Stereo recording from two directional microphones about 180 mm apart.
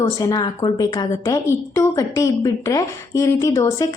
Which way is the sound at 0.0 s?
20° left (ahead or behind).